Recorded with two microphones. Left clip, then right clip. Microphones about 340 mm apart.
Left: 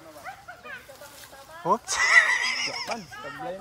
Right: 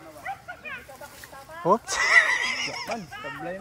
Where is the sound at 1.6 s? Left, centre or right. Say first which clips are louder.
Right 1 dB; centre.